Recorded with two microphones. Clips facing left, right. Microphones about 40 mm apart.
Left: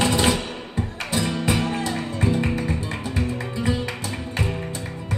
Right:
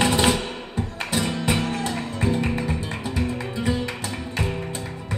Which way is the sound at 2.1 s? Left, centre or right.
Right.